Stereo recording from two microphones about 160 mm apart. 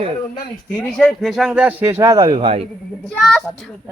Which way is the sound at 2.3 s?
35° right (ahead or behind).